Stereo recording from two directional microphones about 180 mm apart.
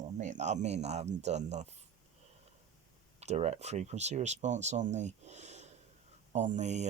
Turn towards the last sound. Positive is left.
turn(degrees=-40)  # may be behind; listen again after turning